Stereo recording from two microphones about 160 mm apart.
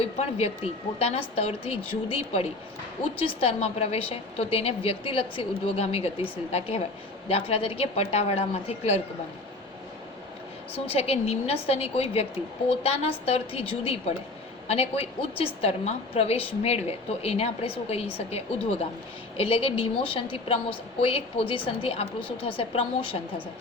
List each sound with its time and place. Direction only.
0.0 s a woman's voice: 40° left (ahead or behind)
10.8 s a woman's voice: 40° left (ahead or behind)